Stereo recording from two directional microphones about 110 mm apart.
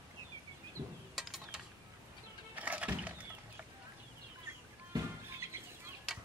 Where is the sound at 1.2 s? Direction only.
5° right (ahead or behind).